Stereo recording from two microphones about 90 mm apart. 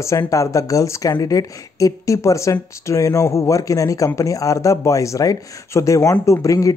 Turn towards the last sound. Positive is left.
turn(degrees=40)  # may be behind; listen again after turning